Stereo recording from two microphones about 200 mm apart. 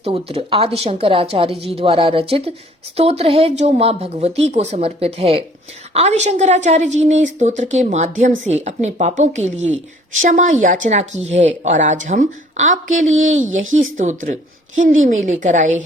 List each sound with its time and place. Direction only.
0.0 s a woman's voice: 30° right (ahead or behind)